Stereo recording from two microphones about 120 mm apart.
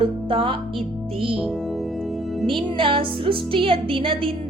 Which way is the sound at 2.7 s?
45° right (ahead or behind).